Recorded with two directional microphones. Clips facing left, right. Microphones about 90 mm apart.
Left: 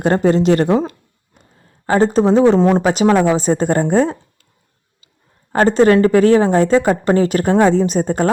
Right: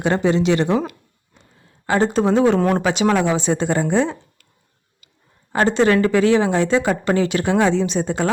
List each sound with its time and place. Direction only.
0.0 s a woman's voice: 45° left (ahead or behind)
1.9 s speech: 35° left (ahead or behind)
2.6 s speech: 20° left (ahead or behind)
2.8 s a woman's voice: 35° left (ahead or behind)
5.5 s speech: 40° left (ahead or behind)